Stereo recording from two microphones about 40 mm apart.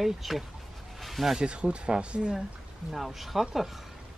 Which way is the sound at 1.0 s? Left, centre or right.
Centre.